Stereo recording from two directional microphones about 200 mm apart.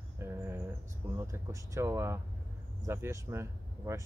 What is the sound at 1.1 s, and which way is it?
A man's voice, 15° right (ahead or behind).